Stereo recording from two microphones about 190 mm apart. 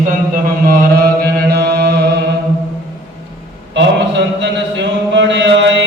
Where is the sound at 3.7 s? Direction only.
65° right (ahead or behind).